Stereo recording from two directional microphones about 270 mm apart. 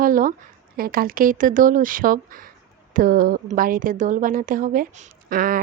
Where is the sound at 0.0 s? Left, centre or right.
Right.